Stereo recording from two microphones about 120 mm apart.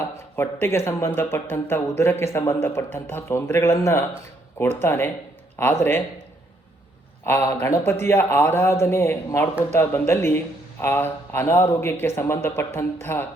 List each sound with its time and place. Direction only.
0.3 s a man's voice: 20° left (ahead or behind)
7.4 s a man's voice: 25° left (ahead or behind)